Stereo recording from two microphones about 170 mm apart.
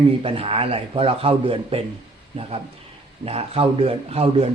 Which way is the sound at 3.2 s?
35° right (ahead or behind).